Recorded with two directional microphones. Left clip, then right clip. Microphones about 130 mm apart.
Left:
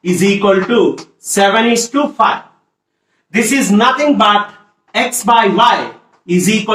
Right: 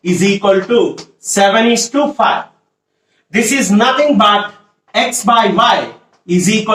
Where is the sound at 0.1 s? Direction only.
25° right (ahead or behind).